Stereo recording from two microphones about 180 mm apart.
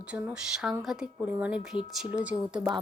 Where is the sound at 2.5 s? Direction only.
25° right (ahead or behind).